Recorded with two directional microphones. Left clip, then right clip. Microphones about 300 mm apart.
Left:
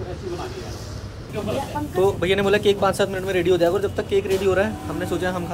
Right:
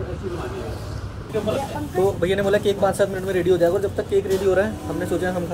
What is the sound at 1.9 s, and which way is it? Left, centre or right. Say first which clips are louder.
Speech: left 1 dB; centre.